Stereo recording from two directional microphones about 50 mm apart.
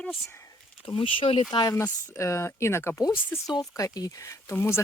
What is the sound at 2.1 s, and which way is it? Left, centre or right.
Speech, left.